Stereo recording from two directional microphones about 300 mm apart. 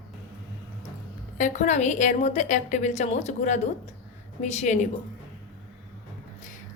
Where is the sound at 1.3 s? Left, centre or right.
Left.